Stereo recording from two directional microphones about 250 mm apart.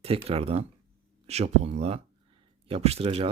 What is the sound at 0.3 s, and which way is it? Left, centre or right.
Speech, right.